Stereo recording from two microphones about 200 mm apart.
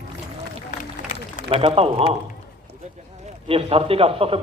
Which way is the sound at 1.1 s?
30° left (ahead or behind).